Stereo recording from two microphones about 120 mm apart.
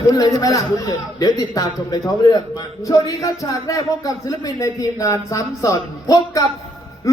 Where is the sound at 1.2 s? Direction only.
30° left (ahead or behind).